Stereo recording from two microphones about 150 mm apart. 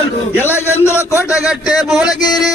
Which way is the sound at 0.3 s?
15° left (ahead or behind).